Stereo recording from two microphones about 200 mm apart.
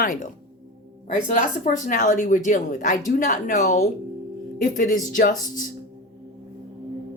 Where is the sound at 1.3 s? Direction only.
40° left (ahead or behind).